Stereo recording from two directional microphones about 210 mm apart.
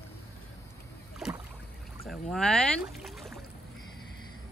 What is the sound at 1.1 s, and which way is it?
Rowboat, 5° right (ahead or behind).